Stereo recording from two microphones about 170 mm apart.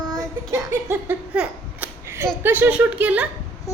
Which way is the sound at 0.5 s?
15° right (ahead or behind).